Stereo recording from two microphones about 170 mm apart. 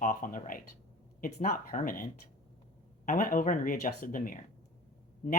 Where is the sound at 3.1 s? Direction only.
50° left (ahead or behind).